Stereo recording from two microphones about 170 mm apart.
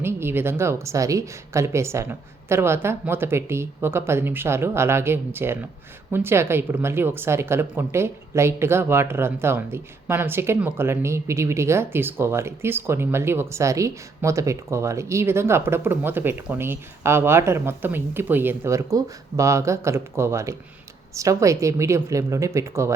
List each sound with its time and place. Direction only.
0.0 s speech: 15° right (ahead or behind)